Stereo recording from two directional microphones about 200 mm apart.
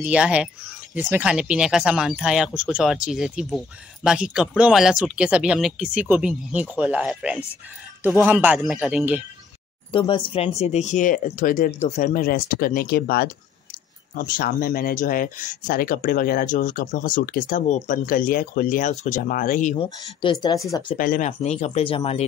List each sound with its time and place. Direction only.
0.0 s speech: 5° right (ahead or behind)
9.9 s speech: 25° left (ahead or behind)
19.8 s speech: 25° left (ahead or behind)
21.0 s speech: 40° left (ahead or behind)